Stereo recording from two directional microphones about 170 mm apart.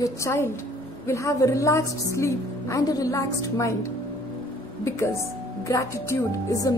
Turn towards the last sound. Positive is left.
turn(degrees=20)  # may be behind; listen again after turning